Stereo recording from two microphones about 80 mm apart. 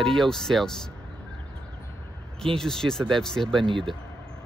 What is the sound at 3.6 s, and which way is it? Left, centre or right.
Speech, right.